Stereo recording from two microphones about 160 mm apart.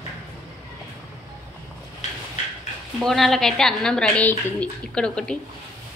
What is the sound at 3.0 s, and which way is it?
A woman's voice, centre (ahead or behind).